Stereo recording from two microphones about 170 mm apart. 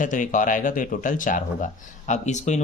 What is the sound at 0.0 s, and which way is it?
Speech, 50° left (ahead or behind).